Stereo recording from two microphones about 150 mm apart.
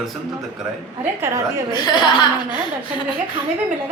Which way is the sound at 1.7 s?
30° left (ahead or behind).